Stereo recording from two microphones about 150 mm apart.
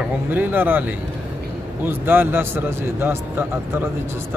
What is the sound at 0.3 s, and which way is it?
Speech, 10° right (ahead or behind).